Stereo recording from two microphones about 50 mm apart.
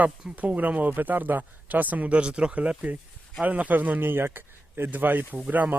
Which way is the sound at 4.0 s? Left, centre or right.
Right.